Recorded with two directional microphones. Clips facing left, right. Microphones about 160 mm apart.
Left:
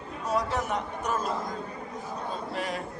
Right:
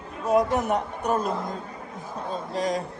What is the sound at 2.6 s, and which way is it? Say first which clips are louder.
Speech: right 8 dB; 40° right (ahead or behind).